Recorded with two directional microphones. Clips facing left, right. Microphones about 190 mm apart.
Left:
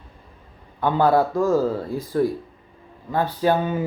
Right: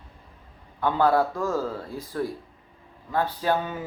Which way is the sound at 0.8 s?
20° left (ahead or behind).